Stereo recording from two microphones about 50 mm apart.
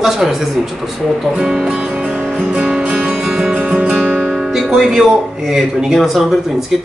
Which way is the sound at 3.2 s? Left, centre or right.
Centre.